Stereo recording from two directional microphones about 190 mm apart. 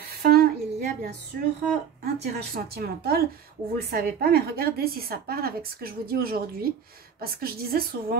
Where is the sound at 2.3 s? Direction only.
55° right (ahead or behind).